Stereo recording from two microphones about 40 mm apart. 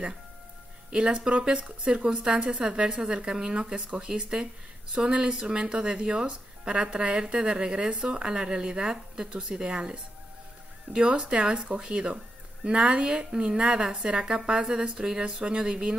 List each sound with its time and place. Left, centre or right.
0.8 s a woman's voice: right